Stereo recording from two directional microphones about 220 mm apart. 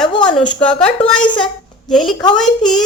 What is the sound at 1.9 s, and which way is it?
Speech, centre (ahead or behind).